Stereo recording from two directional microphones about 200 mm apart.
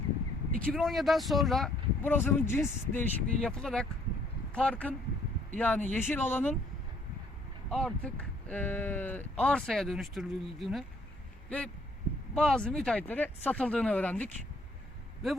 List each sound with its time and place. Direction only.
0.5 s speech: 5° left (ahead or behind)
7.7 s speech: 5° left (ahead or behind)